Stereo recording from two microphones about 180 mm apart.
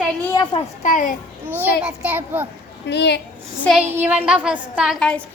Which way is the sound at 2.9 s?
70° left (ahead or behind).